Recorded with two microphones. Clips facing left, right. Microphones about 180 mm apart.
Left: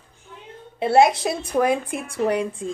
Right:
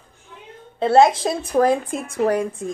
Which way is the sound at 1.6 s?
45° right (ahead or behind).